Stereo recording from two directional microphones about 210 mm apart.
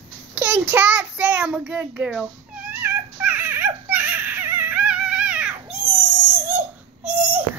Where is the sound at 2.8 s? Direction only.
10° right (ahead or behind).